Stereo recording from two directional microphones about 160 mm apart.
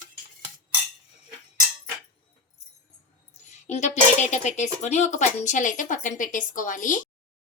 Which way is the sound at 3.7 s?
45° left (ahead or behind).